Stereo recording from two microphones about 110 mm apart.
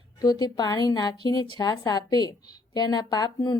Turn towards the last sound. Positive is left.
turn(degrees=35)  # may be behind; listen again after turning